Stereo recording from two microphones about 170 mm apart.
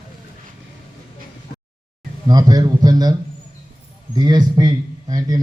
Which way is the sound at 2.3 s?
25° right (ahead or behind).